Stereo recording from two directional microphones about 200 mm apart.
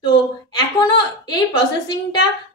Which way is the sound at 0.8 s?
25° left (ahead or behind).